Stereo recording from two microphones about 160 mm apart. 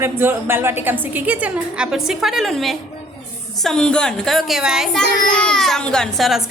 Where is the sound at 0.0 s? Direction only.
15° right (ahead or behind).